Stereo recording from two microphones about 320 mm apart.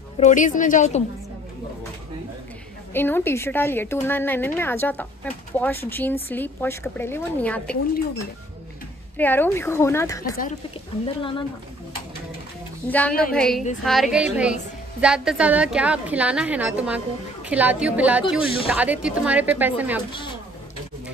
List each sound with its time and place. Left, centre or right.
0.2 s a woman's voice: left
2.9 s a woman's voice: centre
9.1 s a woman's voice: centre
12.8 s a woman's voice: centre